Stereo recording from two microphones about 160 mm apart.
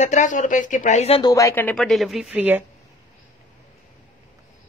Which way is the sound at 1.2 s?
20° left (ahead or behind).